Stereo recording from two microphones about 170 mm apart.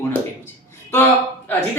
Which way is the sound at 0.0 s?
15° left (ahead or behind).